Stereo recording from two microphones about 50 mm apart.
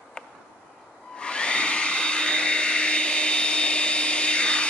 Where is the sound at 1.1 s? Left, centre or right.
Centre.